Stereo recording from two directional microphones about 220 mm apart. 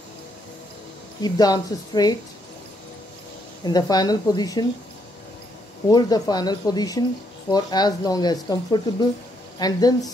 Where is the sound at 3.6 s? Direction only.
15° left (ahead or behind).